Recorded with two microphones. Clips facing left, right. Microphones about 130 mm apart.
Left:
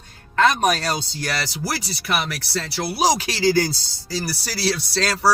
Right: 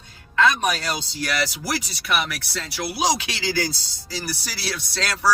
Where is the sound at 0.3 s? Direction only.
45° left (ahead or behind).